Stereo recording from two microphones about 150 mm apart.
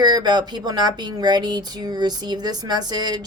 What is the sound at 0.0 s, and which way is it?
Speech, 30° right (ahead or behind).